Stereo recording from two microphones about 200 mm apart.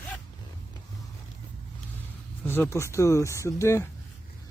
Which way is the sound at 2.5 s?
10° left (ahead or behind).